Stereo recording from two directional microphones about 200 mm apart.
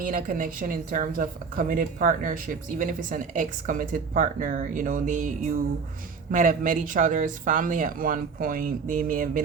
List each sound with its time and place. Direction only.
0.0 s a woman's voice: 45° right (ahead or behind)